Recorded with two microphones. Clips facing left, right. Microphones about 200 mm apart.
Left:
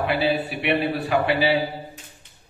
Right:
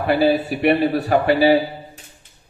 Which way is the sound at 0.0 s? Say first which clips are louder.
Right 5 dB; 40° right (ahead or behind).